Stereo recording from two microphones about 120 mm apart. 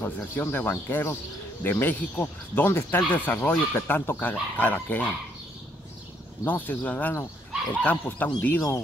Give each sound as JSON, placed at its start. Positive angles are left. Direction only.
{"t": 0.0, "sound": "speech", "side_deg": 15}
{"t": 6.4, "sound": "speech", "side_deg": 15}